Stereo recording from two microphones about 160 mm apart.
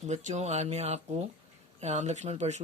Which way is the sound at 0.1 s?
45° right (ahead or behind).